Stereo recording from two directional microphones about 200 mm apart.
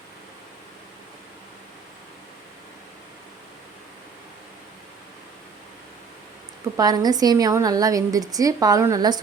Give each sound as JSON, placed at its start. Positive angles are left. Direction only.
{"t": 6.7, "sound": "a woman's voice", "side_deg": -20}